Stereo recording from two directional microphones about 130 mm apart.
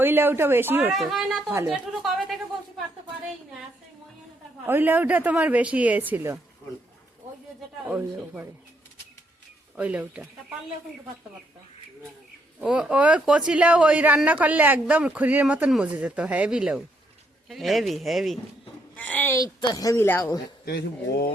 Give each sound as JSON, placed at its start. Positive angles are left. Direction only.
{"t": 0.0, "sound": "a woman's voice", "side_deg": -15}
{"t": 0.9, "sound": "speech", "side_deg": 0}
{"t": 1.6, "sound": "a sound", "side_deg": 0}
{"t": 4.6, "sound": "a woman's voice", "side_deg": -15}
{"t": 7.9, "sound": "a woman's voice", "side_deg": -10}
{"t": 9.7, "sound": "a woman's voice", "side_deg": -10}
{"t": 12.5, "sound": "a woman's voice", "side_deg": -5}
{"t": 18.9, "sound": "speech", "side_deg": 10}
{"t": 19.3, "sound": "speech", "side_deg": 30}